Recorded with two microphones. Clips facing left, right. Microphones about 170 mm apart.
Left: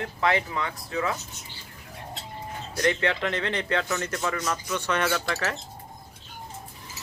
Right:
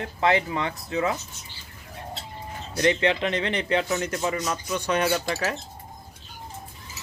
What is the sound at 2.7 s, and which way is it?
Speech, 20° right (ahead or behind).